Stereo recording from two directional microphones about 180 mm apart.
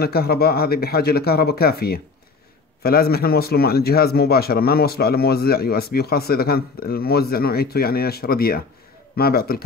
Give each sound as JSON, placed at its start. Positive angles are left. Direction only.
{"t": 0.0, "sound": "a man's voice", "side_deg": 60}